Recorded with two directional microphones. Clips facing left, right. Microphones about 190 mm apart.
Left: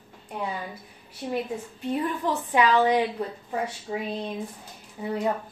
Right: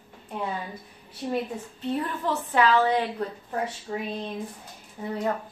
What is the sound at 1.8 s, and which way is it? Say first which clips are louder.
A woman's voice: left 1 dB; 15° left (ahead or behind).